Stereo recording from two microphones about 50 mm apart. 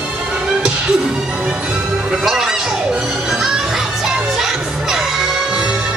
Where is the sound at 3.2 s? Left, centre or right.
Centre.